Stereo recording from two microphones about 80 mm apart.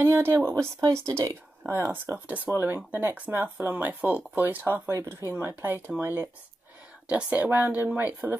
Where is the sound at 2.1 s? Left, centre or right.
Right.